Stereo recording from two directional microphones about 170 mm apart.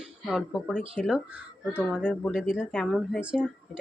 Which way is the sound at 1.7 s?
10° left (ahead or behind).